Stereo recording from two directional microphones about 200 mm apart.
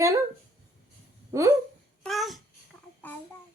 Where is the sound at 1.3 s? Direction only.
15° right (ahead or behind).